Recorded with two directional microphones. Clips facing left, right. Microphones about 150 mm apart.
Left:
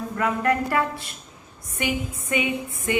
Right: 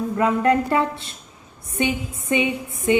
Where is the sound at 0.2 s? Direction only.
25° right (ahead or behind).